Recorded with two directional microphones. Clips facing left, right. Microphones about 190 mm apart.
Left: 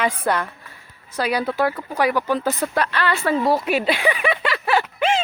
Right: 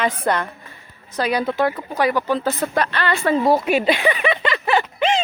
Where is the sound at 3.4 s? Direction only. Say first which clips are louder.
Right 4 dB; centre (ahead or behind).